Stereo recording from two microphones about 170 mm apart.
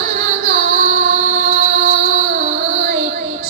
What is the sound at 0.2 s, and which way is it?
Music, 40° right (ahead or behind).